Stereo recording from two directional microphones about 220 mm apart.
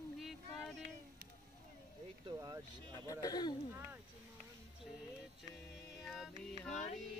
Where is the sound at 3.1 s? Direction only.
15° left (ahead or behind).